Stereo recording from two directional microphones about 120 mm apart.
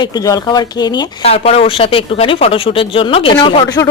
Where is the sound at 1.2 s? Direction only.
55° left (ahead or behind).